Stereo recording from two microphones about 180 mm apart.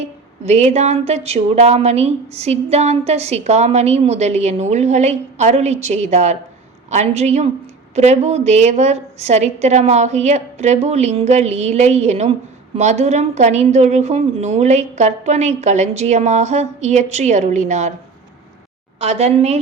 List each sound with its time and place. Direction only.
0.0 s speech: 35° right (ahead or behind)
18.9 s speech: 35° right (ahead or behind)